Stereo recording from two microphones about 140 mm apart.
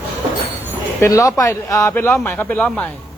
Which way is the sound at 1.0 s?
25° left (ahead or behind).